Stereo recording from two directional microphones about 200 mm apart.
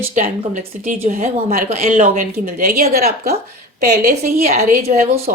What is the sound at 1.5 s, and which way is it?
Speech, 45° right (ahead or behind).